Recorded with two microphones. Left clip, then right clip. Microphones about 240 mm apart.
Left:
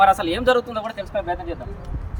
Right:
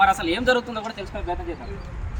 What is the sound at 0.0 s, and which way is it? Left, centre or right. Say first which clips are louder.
Speech: left 3 dB; left.